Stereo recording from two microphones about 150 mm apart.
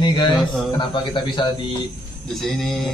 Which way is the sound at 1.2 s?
30° left (ahead or behind).